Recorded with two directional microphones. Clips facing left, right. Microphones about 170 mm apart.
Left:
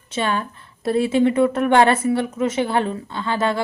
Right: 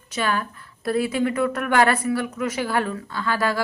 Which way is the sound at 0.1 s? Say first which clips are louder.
Left 2 dB; 25° left (ahead or behind).